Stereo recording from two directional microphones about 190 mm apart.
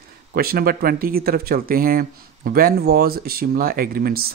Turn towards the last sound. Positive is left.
turn(degrees=-50)  # may be behind; listen again after turning